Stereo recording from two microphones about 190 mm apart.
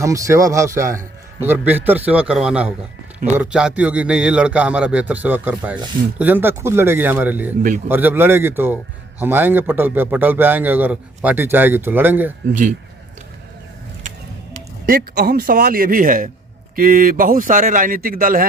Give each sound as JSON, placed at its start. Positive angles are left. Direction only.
{"t": 0.0, "sound": "a man's voice", "side_deg": -15}
{"t": 14.8, "sound": "a man's voice", "side_deg": -50}